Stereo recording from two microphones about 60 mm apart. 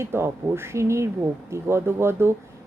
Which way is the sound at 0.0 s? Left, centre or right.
Right.